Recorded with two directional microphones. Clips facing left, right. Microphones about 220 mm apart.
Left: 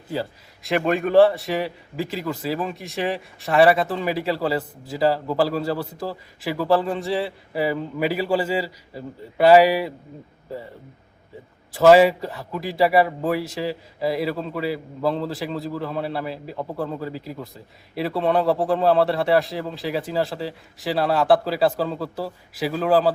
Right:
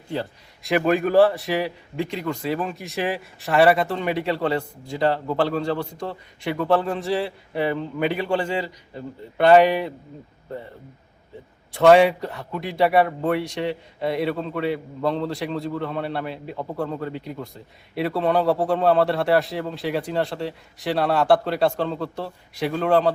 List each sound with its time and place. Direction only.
0.1 s a man's voice: centre (ahead or behind)
11.7 s a man's voice: centre (ahead or behind)